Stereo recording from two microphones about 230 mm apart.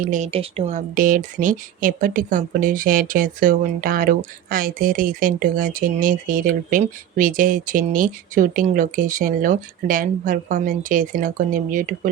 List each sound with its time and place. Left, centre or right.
0.0 s speech: right